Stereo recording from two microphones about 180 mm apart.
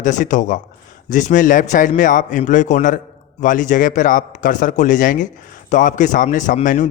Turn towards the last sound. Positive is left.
turn(degrees=45)  # may be behind; listen again after turning